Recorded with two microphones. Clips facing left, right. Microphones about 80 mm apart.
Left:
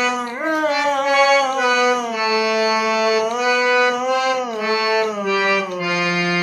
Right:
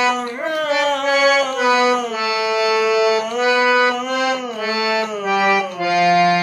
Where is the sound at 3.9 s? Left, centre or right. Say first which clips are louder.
Left 1 dB; centre.